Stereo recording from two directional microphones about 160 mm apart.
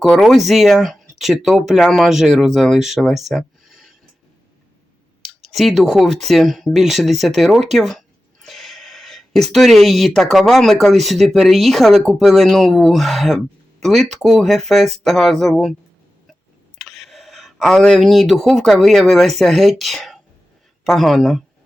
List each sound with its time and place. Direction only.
0.0 s speech: centre (ahead or behind)
5.5 s speech: centre (ahead or behind)
16.7 s speech: centre (ahead or behind)